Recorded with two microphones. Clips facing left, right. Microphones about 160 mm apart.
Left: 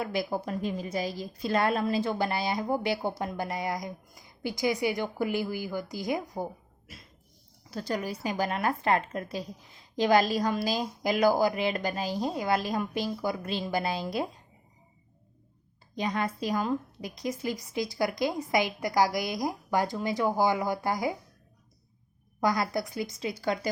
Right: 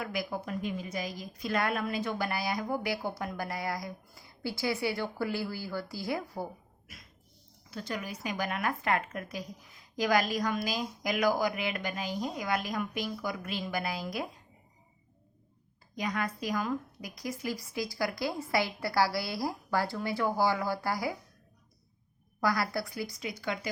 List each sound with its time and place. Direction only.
0.0 s a woman's voice: 30° left (ahead or behind)
7.7 s speech: 35° left (ahead or behind)
16.0 s a woman's voice: 25° left (ahead or behind)
22.4 s a woman's voice: 20° left (ahead or behind)